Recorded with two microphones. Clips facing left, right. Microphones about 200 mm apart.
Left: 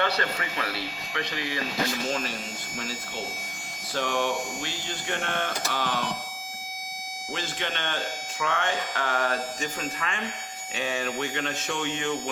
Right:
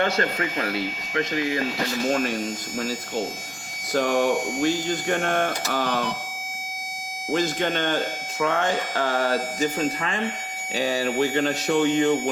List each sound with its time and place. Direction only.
0.0 s speech: 45° right (ahead or behind)
2.7 s speech: 40° right (ahead or behind)
7.3 s speech: 40° right (ahead or behind)